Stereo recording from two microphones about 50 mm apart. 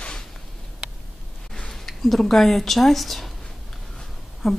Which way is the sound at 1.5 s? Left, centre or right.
Centre.